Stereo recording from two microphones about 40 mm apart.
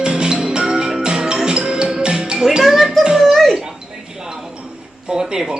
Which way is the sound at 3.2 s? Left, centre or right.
Centre.